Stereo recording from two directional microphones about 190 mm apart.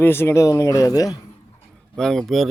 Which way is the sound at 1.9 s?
5° left (ahead or behind).